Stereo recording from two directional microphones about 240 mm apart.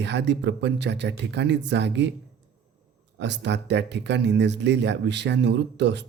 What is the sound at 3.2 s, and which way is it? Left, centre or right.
Speech, right.